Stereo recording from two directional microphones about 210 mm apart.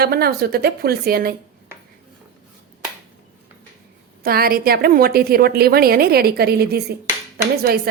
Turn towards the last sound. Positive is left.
turn(degrees=-45)  # may be behind; listen again after turning